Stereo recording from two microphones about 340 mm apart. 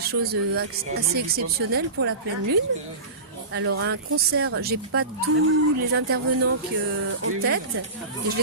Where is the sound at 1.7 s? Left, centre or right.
Right.